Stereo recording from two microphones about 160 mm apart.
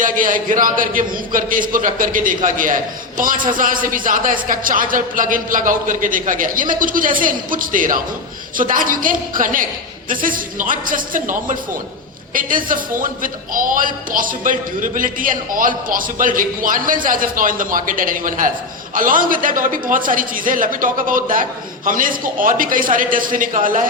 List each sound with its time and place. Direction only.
0.0 s a man's voice: 55° right (ahead or behind)